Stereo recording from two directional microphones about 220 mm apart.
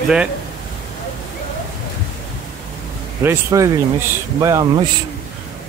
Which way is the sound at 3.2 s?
10° right (ahead or behind).